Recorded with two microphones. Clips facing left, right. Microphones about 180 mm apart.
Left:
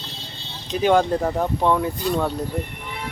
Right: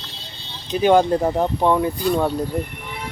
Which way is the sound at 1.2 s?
15° right (ahead or behind).